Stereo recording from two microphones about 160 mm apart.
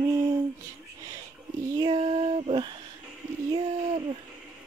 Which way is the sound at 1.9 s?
40° right (ahead or behind).